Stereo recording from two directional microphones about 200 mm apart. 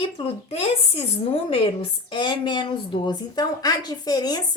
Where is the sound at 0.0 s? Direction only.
30° left (ahead or behind).